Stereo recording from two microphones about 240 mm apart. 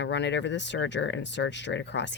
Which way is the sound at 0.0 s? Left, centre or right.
Left.